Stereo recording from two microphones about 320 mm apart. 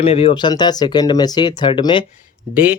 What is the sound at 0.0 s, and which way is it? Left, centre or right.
Speech, centre.